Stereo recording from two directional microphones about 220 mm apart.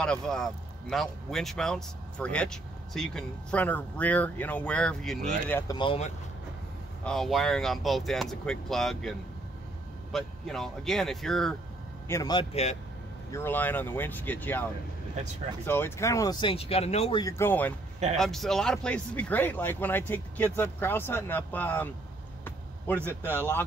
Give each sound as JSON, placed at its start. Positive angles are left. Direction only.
{"t": 0.0, "sound": "speech", "side_deg": 5}
{"t": 5.5, "sound": "speech", "side_deg": 15}
{"t": 7.1, "sound": "speech", "side_deg": 0}
{"t": 10.1, "sound": "speech", "side_deg": 0}
{"t": 12.1, "sound": "speech", "side_deg": 15}
{"t": 13.3, "sound": "speech", "side_deg": 10}
{"t": 17.2, "sound": "speech", "side_deg": 15}
{"t": 22.4, "sound": "a sound", "side_deg": 10}
{"t": 23.0, "sound": "a man's voice", "side_deg": -10}